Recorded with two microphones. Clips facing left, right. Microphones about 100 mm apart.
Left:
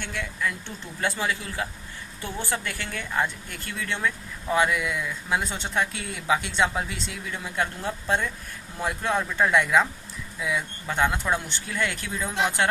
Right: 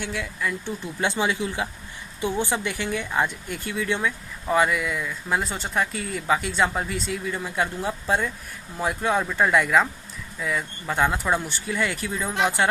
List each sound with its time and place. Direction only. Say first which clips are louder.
0.0 s speech: right 1 dB; 5° right (ahead or behind)
1.0 s speech: right 3 dB; 20° right (ahead or behind); by 12.6 s centre (ahead or behind)